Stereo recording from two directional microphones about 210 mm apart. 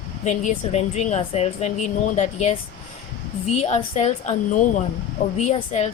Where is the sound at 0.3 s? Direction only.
35° left (ahead or behind).